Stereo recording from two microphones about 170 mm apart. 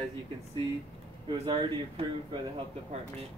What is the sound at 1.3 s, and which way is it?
Speech, 30° right (ahead or behind).